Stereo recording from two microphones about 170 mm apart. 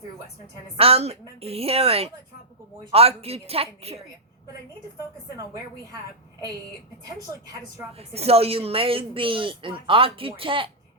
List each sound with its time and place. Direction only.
0.8 s a woman's voice: 35° right (ahead or behind)
7.9 s a woman's voice: 35° right (ahead or behind)